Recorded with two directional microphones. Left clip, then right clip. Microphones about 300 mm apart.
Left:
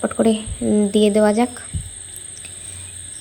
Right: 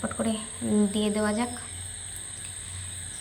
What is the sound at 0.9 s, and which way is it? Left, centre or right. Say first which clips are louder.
Speech: left 13 dB; centre.